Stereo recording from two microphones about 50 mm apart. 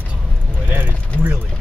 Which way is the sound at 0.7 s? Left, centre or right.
Right.